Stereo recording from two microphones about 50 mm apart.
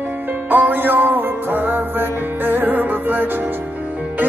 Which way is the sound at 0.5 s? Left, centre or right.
Right.